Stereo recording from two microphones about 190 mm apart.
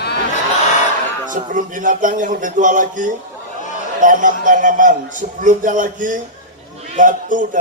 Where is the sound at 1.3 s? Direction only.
45° right (ahead or behind).